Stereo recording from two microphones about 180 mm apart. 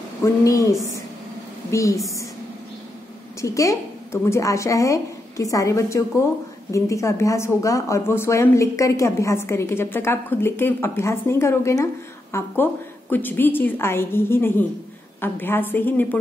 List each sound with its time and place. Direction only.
0.2 s a woman's voice: 20° left (ahead or behind)
3.3 s speech: 15° left (ahead or behind)